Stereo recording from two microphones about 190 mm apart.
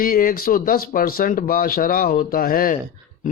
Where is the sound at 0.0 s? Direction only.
50° left (ahead or behind).